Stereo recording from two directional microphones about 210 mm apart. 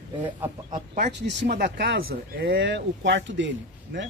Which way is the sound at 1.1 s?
55° right (ahead or behind).